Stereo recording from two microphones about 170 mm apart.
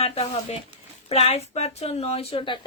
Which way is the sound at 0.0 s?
35° left (ahead or behind).